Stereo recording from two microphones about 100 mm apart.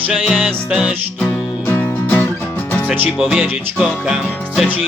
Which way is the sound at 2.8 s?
20° right (ahead or behind).